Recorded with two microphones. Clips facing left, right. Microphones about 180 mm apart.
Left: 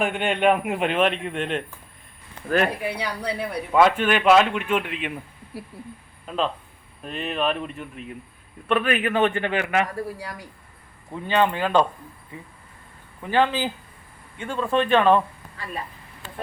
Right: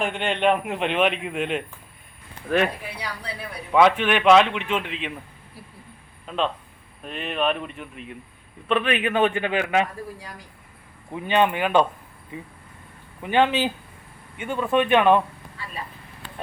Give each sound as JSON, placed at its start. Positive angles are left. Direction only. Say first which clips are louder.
{"t": 0.0, "sound": "a man's voice", "louder": "left 1 dB", "side_deg": 5}
{"t": 2.8, "sound": "a woman's voice", "louder": "left 7 dB", "side_deg": 65}
{"t": 3.7, "sound": "a man's voice", "louder": "right 1 dB", "side_deg": 0}
{"t": 6.2, "sound": "a man's voice", "louder": "even", "side_deg": 5}
{"t": 9.0, "sound": "speech", "louder": "even", "side_deg": -10}
{"t": 9.9, "sound": "speech", "louder": "left 5 dB", "side_deg": 70}
{"t": 11.1, "sound": "speech", "louder": "right 1 dB", "side_deg": -15}
{"t": 13.2, "sound": "speech", "louder": "right 1 dB", "side_deg": -20}